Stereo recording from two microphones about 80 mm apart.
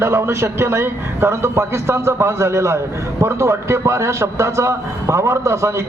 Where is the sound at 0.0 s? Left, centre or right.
Right.